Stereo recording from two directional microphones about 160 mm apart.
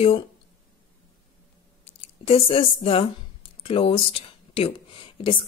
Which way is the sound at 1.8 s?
40° left (ahead or behind).